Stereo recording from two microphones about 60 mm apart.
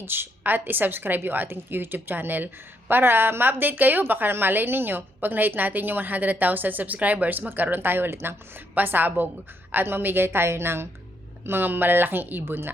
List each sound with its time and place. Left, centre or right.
0.0 s a woman's voice: right